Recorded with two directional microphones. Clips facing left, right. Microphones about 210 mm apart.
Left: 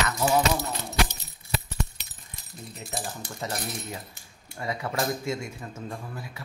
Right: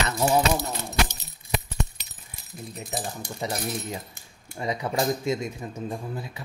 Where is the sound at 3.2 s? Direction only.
15° right (ahead or behind).